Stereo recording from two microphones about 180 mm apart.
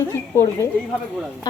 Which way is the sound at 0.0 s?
15° left (ahead or behind).